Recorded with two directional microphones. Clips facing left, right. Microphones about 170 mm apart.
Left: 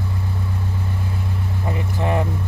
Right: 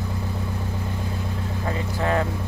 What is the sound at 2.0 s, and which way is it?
Vehicle, 15° left (ahead or behind).